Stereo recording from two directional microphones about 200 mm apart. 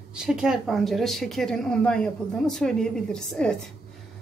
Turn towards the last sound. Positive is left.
turn(degrees=5)  # may be behind; listen again after turning